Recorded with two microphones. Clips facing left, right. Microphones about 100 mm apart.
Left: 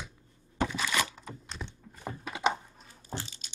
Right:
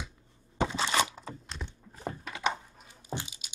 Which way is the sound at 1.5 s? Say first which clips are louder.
Even; centre (ahead or behind).